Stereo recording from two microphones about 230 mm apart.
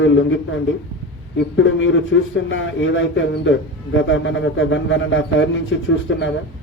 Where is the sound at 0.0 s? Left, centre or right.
Left.